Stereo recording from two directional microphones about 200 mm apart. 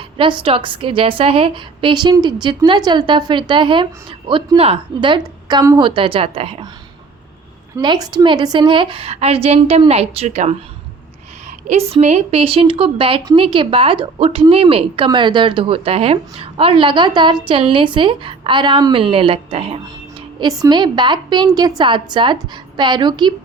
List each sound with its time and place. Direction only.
0.2 s a woman's voice: 25° right (ahead or behind)
7.8 s a woman's voice: 20° right (ahead or behind)
11.7 s a woman's voice: 30° right (ahead or behind)